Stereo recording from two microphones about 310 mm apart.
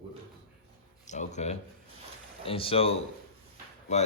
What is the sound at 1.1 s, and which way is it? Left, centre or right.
Speech, left.